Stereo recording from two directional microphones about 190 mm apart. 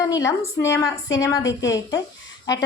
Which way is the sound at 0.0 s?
20° left (ahead or behind).